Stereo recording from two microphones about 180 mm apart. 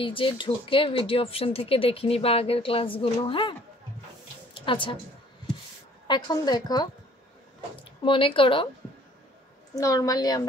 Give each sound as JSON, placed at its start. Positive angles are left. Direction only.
{"t": 0.0, "sound": "speech", "side_deg": 30}
{"t": 4.6, "sound": "speech", "side_deg": 30}
{"t": 6.0, "sound": "a woman's voice", "side_deg": 25}
{"t": 8.0, "sound": "a woman's voice", "side_deg": 30}
{"t": 9.8, "sound": "a woman's voice", "side_deg": 20}